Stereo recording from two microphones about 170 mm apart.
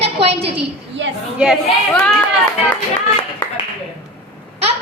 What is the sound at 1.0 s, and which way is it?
Speech, 90° right.